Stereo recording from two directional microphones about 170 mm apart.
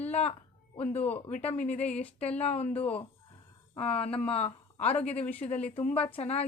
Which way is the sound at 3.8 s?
35° left (ahead or behind).